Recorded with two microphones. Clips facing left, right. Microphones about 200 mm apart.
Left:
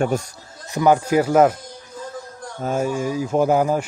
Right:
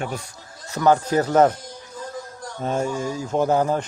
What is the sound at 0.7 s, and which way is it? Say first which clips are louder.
Speech: left 2 dB; 15° left (ahead or behind).